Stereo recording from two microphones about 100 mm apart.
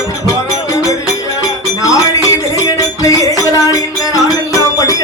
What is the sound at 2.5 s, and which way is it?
Music, 35° left (ahead or behind).